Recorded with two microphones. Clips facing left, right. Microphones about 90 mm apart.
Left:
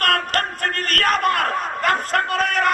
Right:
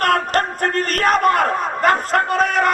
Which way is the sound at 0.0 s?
25° right (ahead or behind).